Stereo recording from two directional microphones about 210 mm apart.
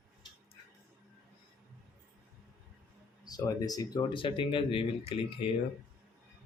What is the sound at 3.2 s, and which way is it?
Speech, 20° left (ahead or behind).